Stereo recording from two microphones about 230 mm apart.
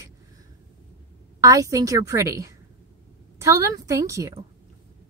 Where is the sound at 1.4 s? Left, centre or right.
Centre.